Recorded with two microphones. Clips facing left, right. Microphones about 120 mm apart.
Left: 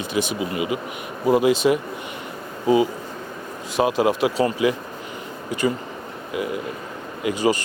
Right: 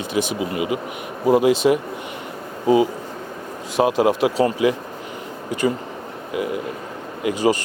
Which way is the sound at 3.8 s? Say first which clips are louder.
Right 2 dB; 50° right (ahead or behind).